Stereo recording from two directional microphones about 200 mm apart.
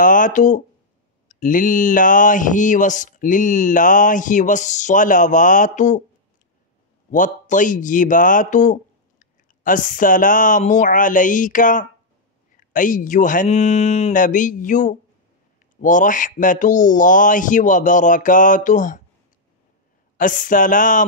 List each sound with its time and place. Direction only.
0.0 s speech: 40° left (ahead or behind)
7.1 s speech: 40° left (ahead or behind)
20.2 s speech: 40° left (ahead or behind)